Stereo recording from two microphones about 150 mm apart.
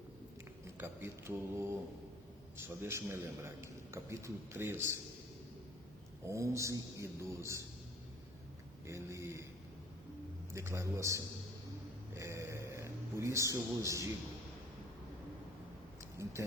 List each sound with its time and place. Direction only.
0.8 s a man's voice: 15° right (ahead or behind)
6.2 s mantra: 20° right (ahead or behind)
8.9 s mantra: 20° right (ahead or behind)
10.5 s mantra: 20° right (ahead or behind)
12.1 s a sound: 20° right (ahead or behind)
16.2 s a man's voice: 15° right (ahead or behind)